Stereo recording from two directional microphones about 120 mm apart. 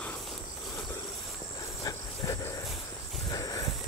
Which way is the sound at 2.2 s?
30° left (ahead or behind).